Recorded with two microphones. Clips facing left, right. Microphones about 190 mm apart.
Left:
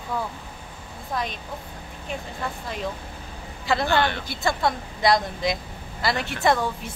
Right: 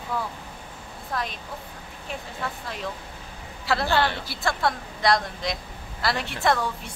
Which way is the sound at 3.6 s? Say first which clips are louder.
Left 1 dB; centre (ahead or behind).